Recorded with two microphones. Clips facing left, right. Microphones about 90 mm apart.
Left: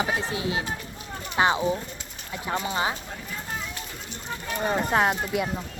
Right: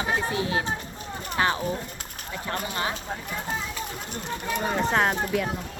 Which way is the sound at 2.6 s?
15° left (ahead or behind).